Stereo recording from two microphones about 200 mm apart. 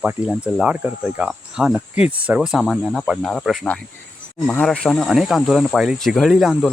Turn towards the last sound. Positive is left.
turn(degrees=0)  # may be behind; listen again after turning